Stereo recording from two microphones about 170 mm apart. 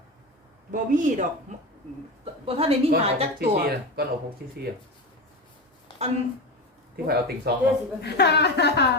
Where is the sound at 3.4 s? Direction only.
70° right (ahead or behind).